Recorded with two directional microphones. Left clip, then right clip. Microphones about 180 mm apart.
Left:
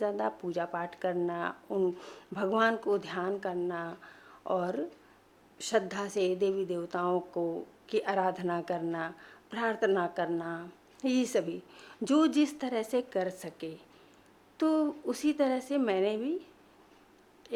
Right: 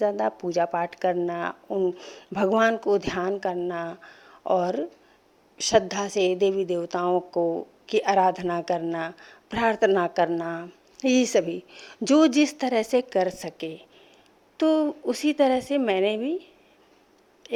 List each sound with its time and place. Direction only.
0.0 s a woman's voice: 25° right (ahead or behind)
1.7 s speech: 10° right (ahead or behind)
2.5 s a woman's voice: 25° right (ahead or behind)